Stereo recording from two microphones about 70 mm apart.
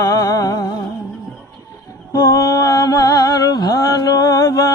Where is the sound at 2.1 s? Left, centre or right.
Left.